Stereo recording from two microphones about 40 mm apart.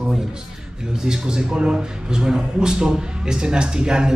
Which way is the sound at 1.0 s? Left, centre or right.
Centre.